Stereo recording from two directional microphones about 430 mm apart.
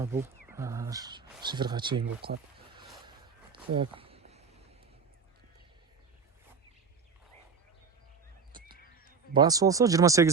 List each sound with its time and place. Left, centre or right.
0.0 s speech: centre
3.8 s a sound: centre
8.5 s honk: right
9.0 s speech: centre